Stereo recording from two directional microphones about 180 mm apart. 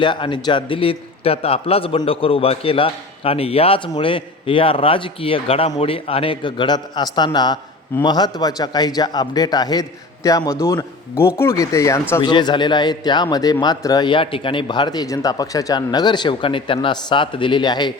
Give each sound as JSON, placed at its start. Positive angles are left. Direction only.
{"t": 0.0, "sound": "a man's voice", "side_deg": 25}